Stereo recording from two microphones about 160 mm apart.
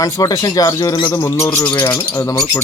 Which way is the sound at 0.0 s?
20° left (ahead or behind).